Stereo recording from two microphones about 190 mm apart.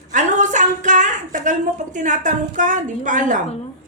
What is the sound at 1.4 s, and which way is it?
A woman's voice, 40° right (ahead or behind).